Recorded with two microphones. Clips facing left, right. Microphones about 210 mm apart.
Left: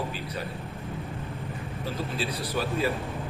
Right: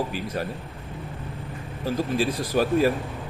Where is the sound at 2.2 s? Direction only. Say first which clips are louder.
Right 4 dB; 45° right (ahead or behind).